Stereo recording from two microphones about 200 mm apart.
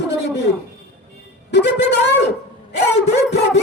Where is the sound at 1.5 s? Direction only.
55° left (ahead or behind).